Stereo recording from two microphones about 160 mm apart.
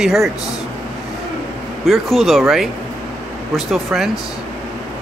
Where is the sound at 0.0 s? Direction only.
Centre (ahead or behind).